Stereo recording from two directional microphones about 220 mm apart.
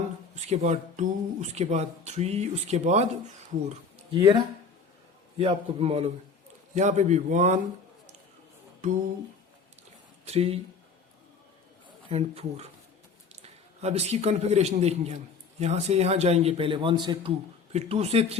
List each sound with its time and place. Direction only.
0.4 s a man's voice: 30° right (ahead or behind)
10.2 s speech: 25° right (ahead or behind)
12.0 s a man's voice: 25° right (ahead or behind)